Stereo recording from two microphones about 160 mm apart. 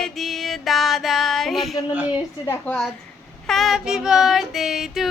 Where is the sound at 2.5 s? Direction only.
5° left (ahead or behind).